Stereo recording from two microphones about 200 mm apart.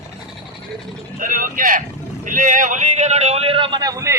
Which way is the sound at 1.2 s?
45° right (ahead or behind).